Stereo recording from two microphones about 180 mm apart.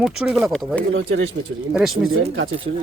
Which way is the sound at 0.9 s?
90° right.